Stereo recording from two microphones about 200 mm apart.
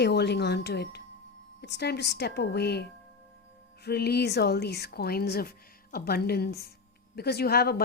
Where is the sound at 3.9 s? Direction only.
55° left (ahead or behind).